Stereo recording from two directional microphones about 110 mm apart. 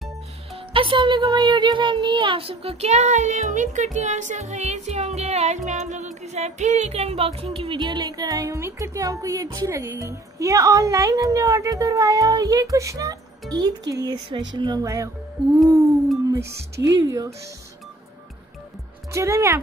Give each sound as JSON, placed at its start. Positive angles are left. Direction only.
{"t": 0.7, "sound": "speech", "side_deg": -50}
{"t": 7.8, "sound": "speech", "side_deg": -40}
{"t": 16.3, "sound": "speech", "side_deg": -25}
{"t": 19.1, "sound": "speech", "side_deg": -25}